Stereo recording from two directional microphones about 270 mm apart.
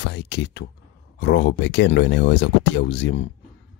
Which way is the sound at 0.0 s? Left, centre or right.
Left.